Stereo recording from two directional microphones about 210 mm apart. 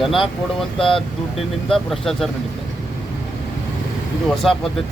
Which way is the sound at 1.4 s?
Centre (ahead or behind).